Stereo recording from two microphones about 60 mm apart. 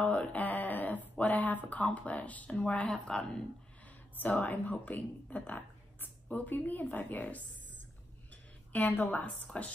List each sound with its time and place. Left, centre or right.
0.0 s a sound: left
1.7 s speech: left
2.9 s speech: centre
4.2 s speech: left
8.7 s speech: left